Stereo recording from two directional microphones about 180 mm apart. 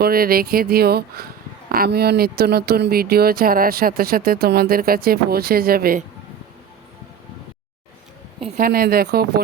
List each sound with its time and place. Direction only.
0.0 s speech: 55° right (ahead or behind)
8.4 s speech: 35° right (ahead or behind)
8.6 s speech: 55° right (ahead or behind)